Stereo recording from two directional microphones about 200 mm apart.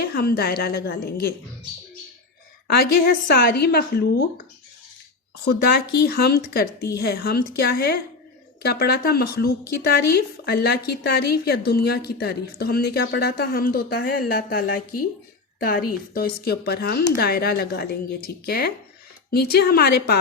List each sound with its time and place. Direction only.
0.0 s a woman's voice: 50° left (ahead or behind)
2.6 s a woman's voice: 50° left (ahead or behind)
5.5 s a woman's voice: 55° left (ahead or behind)